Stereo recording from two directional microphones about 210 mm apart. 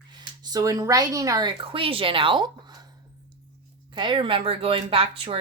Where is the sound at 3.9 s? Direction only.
20° right (ahead or behind).